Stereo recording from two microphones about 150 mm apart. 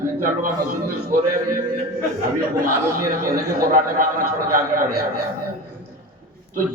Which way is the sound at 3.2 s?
60° right (ahead or behind).